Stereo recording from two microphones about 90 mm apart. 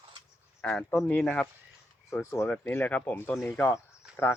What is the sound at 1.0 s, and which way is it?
Speech, 20° left (ahead or behind).